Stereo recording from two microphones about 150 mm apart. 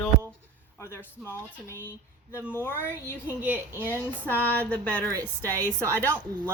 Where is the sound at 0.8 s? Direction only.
20° left (ahead or behind).